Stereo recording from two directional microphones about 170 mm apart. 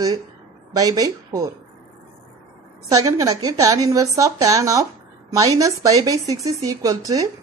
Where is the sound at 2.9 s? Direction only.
20° right (ahead or behind).